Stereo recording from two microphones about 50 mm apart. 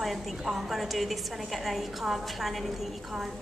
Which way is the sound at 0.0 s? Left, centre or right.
Centre.